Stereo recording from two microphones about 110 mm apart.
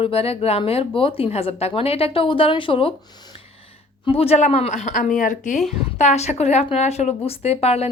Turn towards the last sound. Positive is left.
turn(degrees=70)  # may be behind; listen again after turning